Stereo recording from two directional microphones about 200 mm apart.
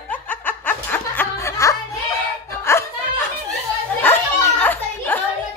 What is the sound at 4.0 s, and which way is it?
Children playing, 10° left (ahead or behind).